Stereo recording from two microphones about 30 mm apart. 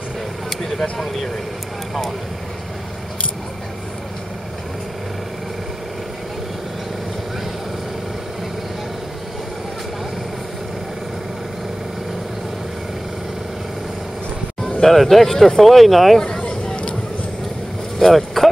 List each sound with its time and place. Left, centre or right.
14.8 s speech: centre
16.2 s a sound: left
18.0 s vehicle: centre